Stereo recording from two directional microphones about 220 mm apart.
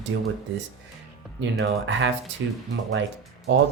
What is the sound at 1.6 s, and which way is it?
Speech, 55° right (ahead or behind).